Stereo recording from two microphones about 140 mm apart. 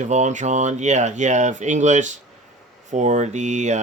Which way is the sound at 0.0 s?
55° right (ahead or behind).